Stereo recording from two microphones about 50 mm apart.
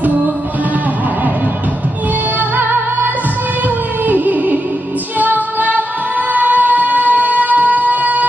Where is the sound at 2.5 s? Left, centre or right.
Right.